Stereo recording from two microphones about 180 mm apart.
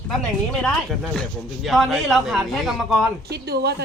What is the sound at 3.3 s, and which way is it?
Speech, 65° right (ahead or behind).